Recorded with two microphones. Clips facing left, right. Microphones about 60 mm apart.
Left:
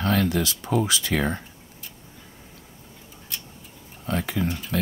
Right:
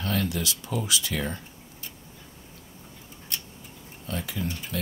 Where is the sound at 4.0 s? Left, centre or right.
Left.